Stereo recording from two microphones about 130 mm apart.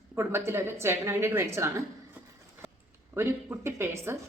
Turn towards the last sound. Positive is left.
turn(degrees=-20)  # may be behind; listen again after turning